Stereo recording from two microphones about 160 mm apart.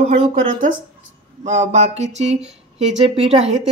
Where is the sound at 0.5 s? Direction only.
55° right (ahead or behind).